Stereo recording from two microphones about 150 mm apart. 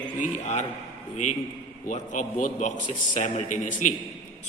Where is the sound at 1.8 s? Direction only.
55° left (ahead or behind).